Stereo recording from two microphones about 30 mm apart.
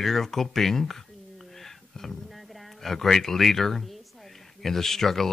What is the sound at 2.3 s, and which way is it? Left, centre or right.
A man's voice, centre.